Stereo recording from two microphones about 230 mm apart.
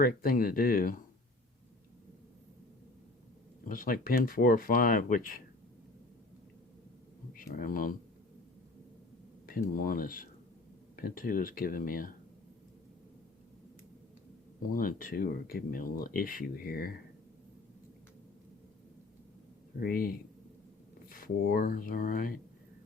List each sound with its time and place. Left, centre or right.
0.0 s speech: left
3.7 s speech: left
7.3 s speech: left
9.5 s speech: left
14.7 s speech: left
19.8 s speech: left